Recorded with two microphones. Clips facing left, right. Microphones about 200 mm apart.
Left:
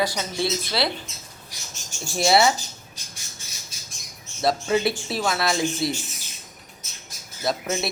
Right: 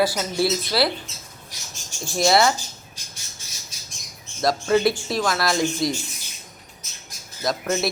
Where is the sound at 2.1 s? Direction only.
5° left (ahead or behind).